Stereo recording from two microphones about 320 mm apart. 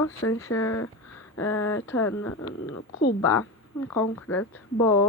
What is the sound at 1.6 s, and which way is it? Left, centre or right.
Speech, centre.